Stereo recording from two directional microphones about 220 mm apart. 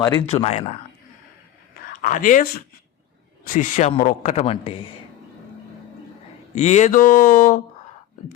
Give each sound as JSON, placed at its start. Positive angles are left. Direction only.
{"t": 0.0, "sound": "speech", "side_deg": 20}
{"t": 1.9, "sound": "speech", "side_deg": 40}
{"t": 6.5, "sound": "speech", "side_deg": 30}